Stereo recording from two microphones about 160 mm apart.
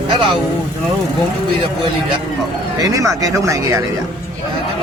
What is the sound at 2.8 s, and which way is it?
Speech, 20° right (ahead or behind).